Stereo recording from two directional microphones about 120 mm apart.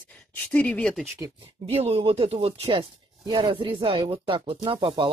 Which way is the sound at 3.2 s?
40° right (ahead or behind).